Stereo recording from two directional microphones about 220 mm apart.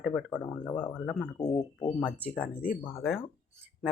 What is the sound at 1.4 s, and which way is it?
Speech, 15° left (ahead or behind).